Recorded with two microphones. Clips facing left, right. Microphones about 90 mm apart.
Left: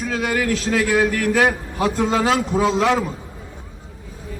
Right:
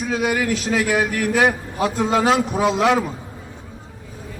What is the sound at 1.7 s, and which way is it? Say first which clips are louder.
A man's voice: even; 20° right (ahead or behind).